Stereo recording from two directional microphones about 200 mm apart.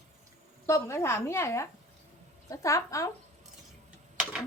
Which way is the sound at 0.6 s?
15° left (ahead or behind).